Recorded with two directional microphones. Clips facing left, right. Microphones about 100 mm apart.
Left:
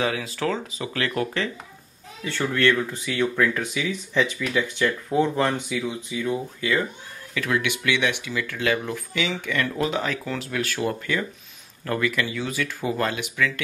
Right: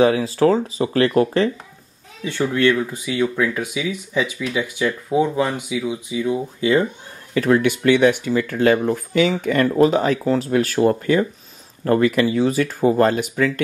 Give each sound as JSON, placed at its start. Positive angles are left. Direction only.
{"t": 0.0, "sound": "speech", "side_deg": -35}
{"t": 2.5, "sound": "speech", "side_deg": -15}
{"t": 6.6, "sound": "speech", "side_deg": -25}
{"t": 7.3, "sound": "speech", "side_deg": -40}